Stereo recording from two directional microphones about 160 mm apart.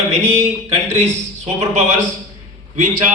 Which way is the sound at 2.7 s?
50° right (ahead or behind).